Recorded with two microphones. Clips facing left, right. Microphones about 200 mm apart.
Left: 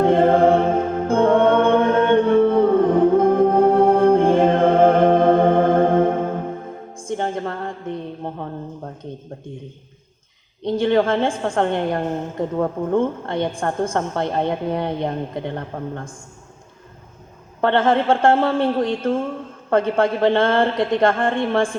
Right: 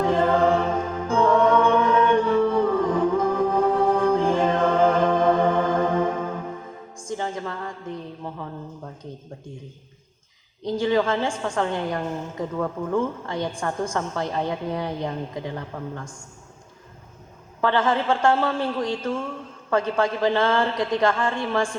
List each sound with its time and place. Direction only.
0.0 s music: 55° left (ahead or behind)
8.2 s a sound: 50° left (ahead or behind)
10.8 s a woman's voice: 55° left (ahead or behind)
12.5 s speech: 35° left (ahead or behind)
13.1 s a woman's voice: 55° left (ahead or behind)
17.6 s a woman's voice: 55° left (ahead or behind)